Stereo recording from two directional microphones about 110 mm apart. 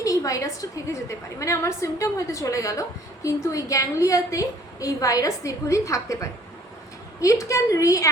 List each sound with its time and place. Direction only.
0.0 s a woman's voice: 30° left (ahead or behind)